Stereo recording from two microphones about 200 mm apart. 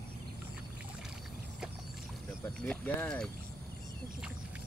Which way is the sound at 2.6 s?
5° left (ahead or behind).